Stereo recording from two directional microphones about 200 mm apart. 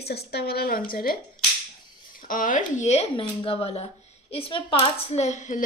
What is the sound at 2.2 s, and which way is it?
A woman's voice, 40° left (ahead or behind).